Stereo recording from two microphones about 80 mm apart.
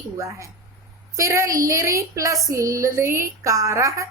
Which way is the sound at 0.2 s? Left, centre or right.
Right.